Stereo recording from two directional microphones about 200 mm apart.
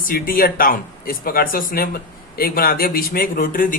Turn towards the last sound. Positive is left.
turn(degrees=45)  # may be behind; listen again after turning